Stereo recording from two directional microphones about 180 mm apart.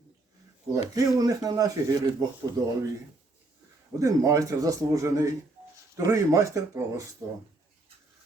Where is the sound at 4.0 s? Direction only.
20° right (ahead or behind).